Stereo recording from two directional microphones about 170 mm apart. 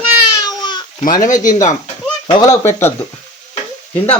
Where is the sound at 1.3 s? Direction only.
50° left (ahead or behind).